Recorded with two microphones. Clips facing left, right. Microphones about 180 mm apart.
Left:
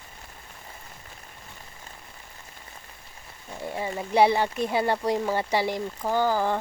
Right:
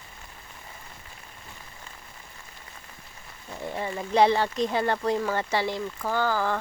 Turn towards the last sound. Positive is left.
turn(degrees=20)  # may be behind; listen again after turning